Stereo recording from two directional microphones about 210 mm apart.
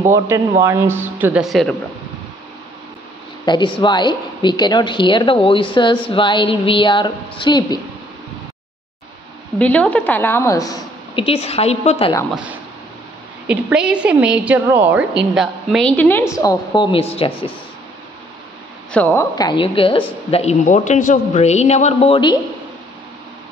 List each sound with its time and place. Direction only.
0.1 s a woman's voice: 15° right (ahead or behind)
3.4 s speech: 20° left (ahead or behind)
9.6 s a woman's voice: 5° left (ahead or behind); by 12.1 s 30° left (ahead or behind)
13.5 s a woman's voice: 5° right (ahead or behind)
16.3 s speech: 20° left (ahead or behind)
18.9 s a man's voice: 5° left (ahead or behind); by 22.4 s 25° left (ahead or behind)